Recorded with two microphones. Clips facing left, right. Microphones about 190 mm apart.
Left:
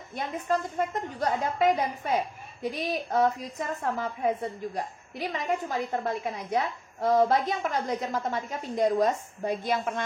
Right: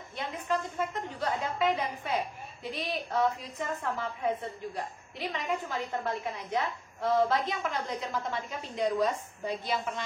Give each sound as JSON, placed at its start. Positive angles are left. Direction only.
{"t": 0.1, "sound": "a woman's voice", "side_deg": 45}